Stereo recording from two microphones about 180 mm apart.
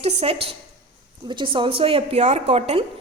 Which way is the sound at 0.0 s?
35° right (ahead or behind).